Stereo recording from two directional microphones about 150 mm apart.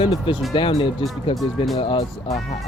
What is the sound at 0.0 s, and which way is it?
Speech, 35° left (ahead or behind).